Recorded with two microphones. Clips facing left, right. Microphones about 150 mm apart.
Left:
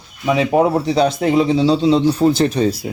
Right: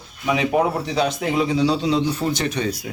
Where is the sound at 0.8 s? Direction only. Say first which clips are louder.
Left 6 dB; 35° left (ahead or behind).